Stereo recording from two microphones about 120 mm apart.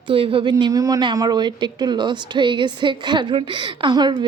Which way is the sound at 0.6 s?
30° right (ahead or behind).